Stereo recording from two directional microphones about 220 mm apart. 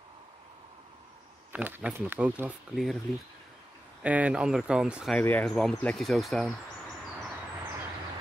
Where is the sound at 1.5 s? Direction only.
10° right (ahead or behind).